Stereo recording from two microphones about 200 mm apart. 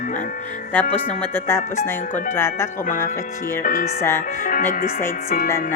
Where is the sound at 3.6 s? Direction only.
45° left (ahead or behind).